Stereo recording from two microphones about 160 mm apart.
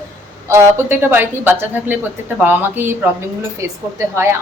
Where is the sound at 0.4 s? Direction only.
15° right (ahead or behind).